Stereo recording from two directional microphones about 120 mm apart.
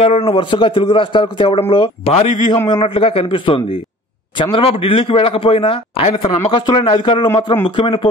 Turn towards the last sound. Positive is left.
turn(degrees=45)  # may be behind; listen again after turning